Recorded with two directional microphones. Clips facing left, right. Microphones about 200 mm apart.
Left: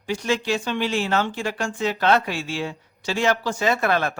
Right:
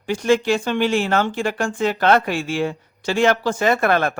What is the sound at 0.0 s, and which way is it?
Speech, 50° right (ahead or behind).